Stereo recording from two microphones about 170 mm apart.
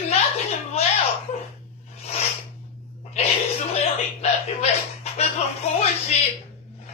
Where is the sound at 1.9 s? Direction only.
35° left (ahead or behind).